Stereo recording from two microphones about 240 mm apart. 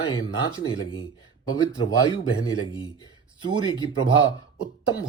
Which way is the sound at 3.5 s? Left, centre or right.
Centre.